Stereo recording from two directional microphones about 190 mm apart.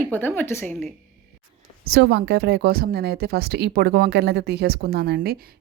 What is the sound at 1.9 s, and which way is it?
A woman's voice, 65° right (ahead or behind).